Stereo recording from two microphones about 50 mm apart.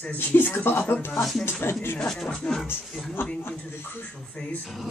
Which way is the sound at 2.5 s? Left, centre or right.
Centre.